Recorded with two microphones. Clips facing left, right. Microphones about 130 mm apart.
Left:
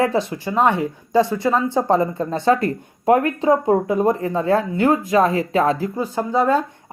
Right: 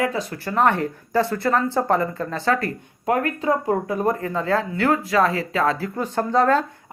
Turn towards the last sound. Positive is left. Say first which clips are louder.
# even
turn(degrees=10)  # may be behind; listen again after turning